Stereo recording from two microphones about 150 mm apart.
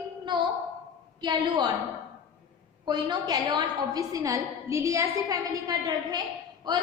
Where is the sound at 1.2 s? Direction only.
30° right (ahead or behind).